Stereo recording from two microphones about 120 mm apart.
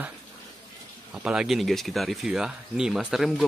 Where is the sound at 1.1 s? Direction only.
10° right (ahead or behind).